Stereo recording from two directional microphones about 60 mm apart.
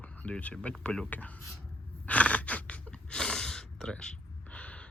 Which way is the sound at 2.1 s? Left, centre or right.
Left.